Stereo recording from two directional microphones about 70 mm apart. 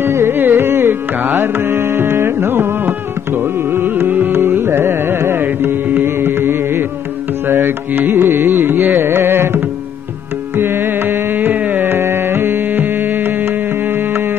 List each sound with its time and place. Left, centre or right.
0.0 s music: right
2.2 s carnatic music: right